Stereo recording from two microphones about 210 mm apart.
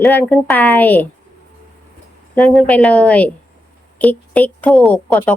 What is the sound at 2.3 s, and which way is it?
A woman's voice, 5° left (ahead or behind).